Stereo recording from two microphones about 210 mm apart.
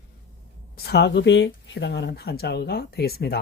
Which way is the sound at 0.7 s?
50° left (ahead or behind).